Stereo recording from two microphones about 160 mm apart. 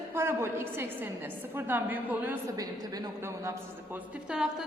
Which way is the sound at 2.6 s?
20° right (ahead or behind).